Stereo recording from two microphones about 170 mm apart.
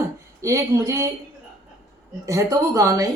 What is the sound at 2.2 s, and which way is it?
Speech, 20° right (ahead or behind).